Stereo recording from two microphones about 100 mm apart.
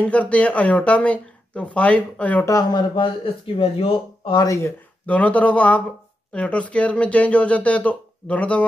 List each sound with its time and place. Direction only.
0.0 s speech: 15° left (ahead or behind)
2.7 s speech: 55° left (ahead or behind)
4.4 s speech: 30° left (ahead or behind)
5.0 s speech: 15° left (ahead or behind)